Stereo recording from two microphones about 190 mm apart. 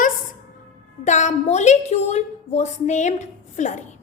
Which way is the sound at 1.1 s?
40° left (ahead or behind).